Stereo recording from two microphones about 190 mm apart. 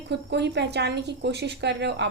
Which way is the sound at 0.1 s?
65° right (ahead or behind).